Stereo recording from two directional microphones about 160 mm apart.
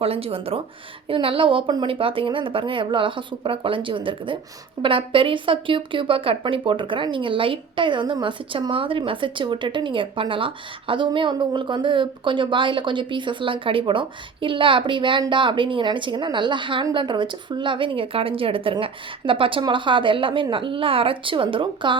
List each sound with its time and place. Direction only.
0.0 s speech: 35° right (ahead or behind)